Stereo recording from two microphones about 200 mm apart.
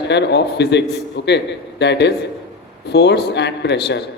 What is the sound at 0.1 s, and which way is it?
A man's voice, 60° left (ahead or behind).